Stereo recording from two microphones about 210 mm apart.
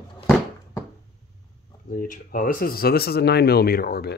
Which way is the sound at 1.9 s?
40° left (ahead or behind).